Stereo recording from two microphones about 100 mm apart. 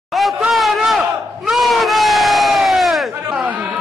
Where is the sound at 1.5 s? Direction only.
Centre (ahead or behind).